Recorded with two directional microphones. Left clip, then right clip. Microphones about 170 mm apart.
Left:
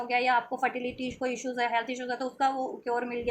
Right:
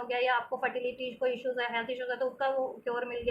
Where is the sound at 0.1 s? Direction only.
55° left (ahead or behind).